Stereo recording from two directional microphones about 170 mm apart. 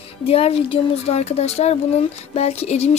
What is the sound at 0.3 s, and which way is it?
Speech, 35° left (ahead or behind).